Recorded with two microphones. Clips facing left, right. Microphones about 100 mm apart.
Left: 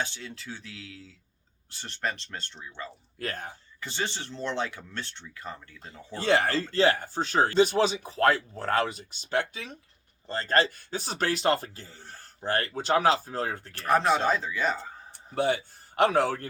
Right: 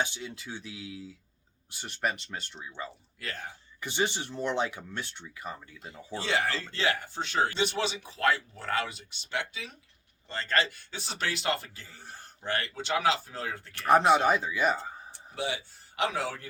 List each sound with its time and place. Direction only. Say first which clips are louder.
0.0 s speech: right 1 dB; 15° right (ahead or behind)
3.2 s speech: left 5 dB; 45° left (ahead or behind)
3.8 s speech: right 3 dB; 15° right (ahead or behind)
6.1 s a man's voice: left 5 dB; 50° left (ahead or behind)
12.0 s a sound: right 1 dB; 15° right (ahead or behind)
12.4 s a man's voice: left 4 dB; 40° left (ahead or behind)
13.7 s speech: right 2 dB; 20° right (ahead or behind)
15.4 s speech: left 8 dB; 50° left (ahead or behind)